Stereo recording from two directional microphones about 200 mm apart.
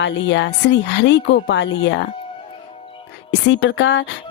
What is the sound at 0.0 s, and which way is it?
Speech, 65° left (ahead or behind).